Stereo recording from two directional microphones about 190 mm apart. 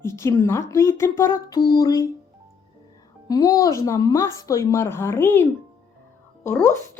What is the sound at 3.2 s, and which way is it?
Speech, 20° left (ahead or behind).